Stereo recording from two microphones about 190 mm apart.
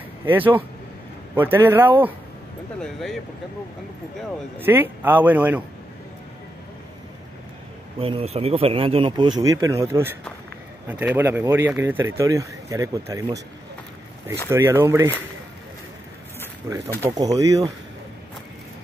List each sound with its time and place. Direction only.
0.2 s speech: 10° right (ahead or behind)
2.8 s speech: centre (ahead or behind)
4.6 s speech: 10° right (ahead or behind)
8.0 s speech: 30° right (ahead or behind)
14.5 s speech: 15° right (ahead or behind)
16.6 s speech: 15° right (ahead or behind)